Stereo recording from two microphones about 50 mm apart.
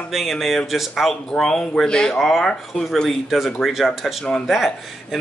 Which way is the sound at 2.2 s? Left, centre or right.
Centre.